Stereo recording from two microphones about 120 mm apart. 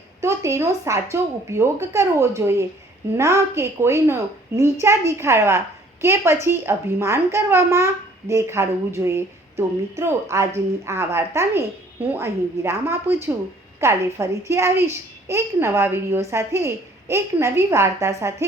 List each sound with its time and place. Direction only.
0.2 s a child's voice: 25° right (ahead or behind)